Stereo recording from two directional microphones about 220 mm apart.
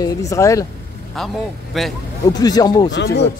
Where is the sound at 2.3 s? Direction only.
15° left (ahead or behind).